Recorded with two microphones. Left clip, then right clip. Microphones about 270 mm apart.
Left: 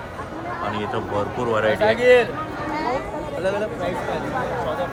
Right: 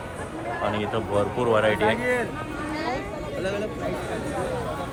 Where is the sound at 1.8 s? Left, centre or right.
Left.